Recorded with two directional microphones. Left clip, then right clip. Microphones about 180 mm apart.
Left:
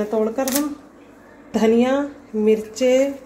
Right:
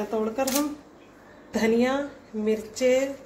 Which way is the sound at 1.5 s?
40° left (ahead or behind).